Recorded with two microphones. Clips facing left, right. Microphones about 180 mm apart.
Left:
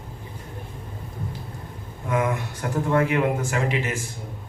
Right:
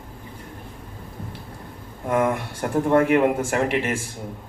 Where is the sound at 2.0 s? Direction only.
50° right (ahead or behind).